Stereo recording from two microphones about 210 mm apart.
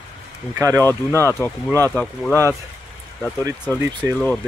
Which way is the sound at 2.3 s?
10° right (ahead or behind).